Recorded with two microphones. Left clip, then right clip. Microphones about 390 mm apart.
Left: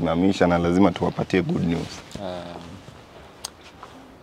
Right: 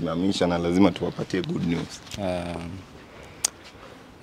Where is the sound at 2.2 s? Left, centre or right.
Right.